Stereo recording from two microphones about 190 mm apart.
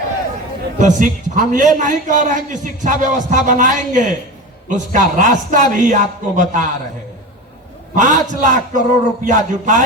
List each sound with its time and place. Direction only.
0.8 s a man's voice: 40° right (ahead or behind)
7.9 s a man's voice: 40° right (ahead or behind)